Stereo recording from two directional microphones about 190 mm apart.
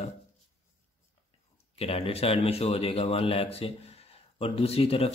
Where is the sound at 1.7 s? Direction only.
30° left (ahead or behind).